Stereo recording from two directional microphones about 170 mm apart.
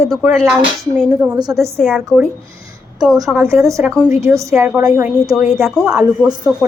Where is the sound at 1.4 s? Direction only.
20° right (ahead or behind).